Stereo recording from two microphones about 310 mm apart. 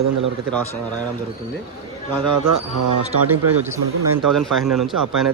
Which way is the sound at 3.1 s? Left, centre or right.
Right.